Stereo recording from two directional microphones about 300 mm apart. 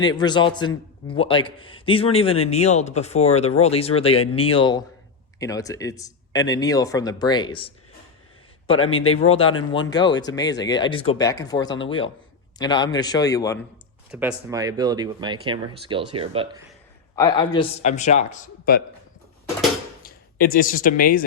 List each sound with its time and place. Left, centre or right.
0.0 s a man's voice: centre
8.7 s speech: left
9.3 s speech: centre
14.1 s speech: centre
17.2 s a man's voice: centre
20.0 s speech: left